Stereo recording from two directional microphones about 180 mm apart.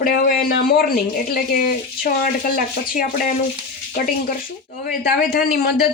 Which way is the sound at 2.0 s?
50° left (ahead or behind).